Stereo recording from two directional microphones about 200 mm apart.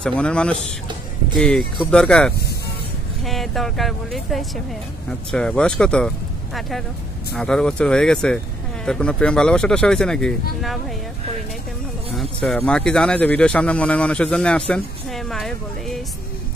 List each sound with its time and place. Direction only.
0.0 s speech: 5° left (ahead or behind)
1.9 s speech: 5° left (ahead or behind)
12.2 s speech: 5° left (ahead or behind)